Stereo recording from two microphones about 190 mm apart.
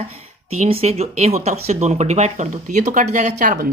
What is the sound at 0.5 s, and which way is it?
Speech, 30° right (ahead or behind).